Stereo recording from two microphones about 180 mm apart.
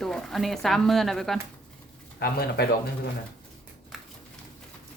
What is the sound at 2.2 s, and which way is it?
Speech, 60° left (ahead or behind).